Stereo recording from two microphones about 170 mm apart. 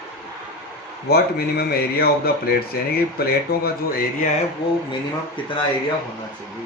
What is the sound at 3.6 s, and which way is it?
Speech, 60° left (ahead or behind).